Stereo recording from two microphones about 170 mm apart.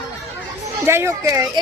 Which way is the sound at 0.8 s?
15° right (ahead or behind).